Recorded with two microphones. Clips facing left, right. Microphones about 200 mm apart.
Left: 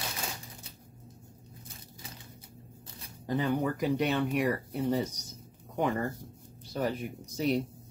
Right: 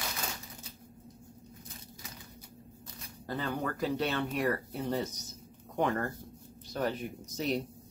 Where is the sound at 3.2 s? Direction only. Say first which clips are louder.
Left 5 dB; 15° left (ahead or behind).